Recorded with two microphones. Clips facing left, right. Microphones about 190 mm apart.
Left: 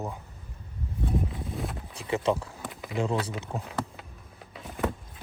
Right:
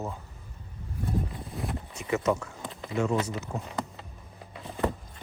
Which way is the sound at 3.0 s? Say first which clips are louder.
Right 1 dB; 30° left (ahead or behind).